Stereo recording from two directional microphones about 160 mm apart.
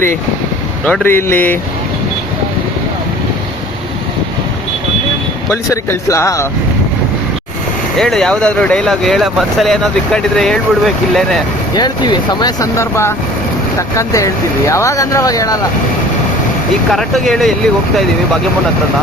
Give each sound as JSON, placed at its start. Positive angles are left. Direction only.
{"t": 0.9, "sound": "a man's voice", "side_deg": 10}
{"t": 5.5, "sound": "speech", "side_deg": 20}
{"t": 7.9, "sound": "speech", "side_deg": 5}
{"t": 11.7, "sound": "speech", "side_deg": 25}
{"t": 16.9, "sound": "speech", "side_deg": 0}